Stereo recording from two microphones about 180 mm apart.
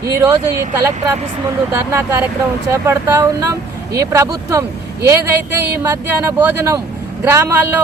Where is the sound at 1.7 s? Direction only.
15° right (ahead or behind).